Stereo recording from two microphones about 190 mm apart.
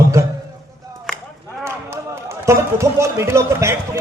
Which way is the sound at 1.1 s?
5° left (ahead or behind).